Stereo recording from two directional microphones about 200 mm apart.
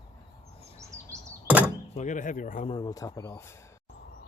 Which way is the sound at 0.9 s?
15° right (ahead or behind).